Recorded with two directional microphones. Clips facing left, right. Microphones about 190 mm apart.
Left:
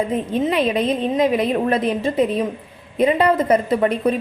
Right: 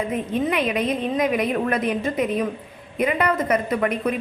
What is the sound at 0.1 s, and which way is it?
A woman's voice, 30° left (ahead or behind).